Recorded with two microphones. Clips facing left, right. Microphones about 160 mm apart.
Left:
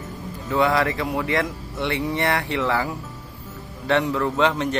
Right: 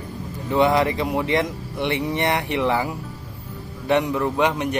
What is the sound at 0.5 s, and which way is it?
Speech, 20° right (ahead or behind).